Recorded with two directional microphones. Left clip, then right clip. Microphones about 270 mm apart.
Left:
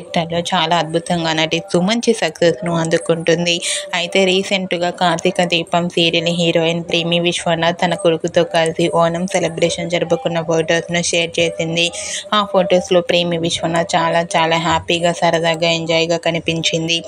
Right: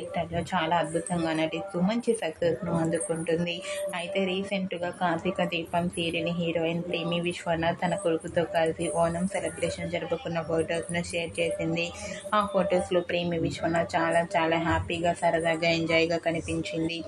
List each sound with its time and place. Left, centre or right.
0.1 s a woman's voice: left
12.3 s a woman's voice: left